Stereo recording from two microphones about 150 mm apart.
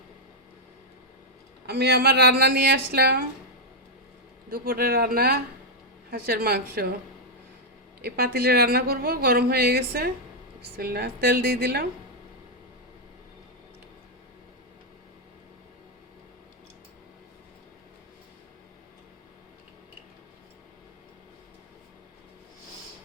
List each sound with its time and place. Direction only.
1.6 s speech: 90° right
4.4 s speech: 85° right
8.0 s speech: 90° right